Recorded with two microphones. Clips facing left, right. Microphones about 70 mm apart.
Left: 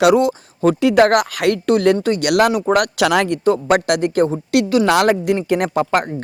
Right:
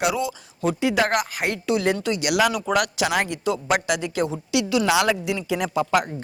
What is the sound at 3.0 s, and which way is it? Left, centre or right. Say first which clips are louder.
Speech: left 7 dB; left.